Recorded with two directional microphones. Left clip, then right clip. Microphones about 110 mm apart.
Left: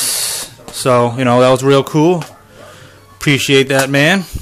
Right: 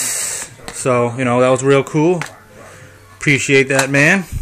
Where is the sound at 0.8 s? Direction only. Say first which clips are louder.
Left 4 dB; 25° left (ahead or behind).